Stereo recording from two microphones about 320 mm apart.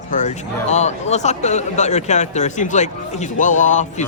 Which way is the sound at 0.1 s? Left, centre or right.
Left.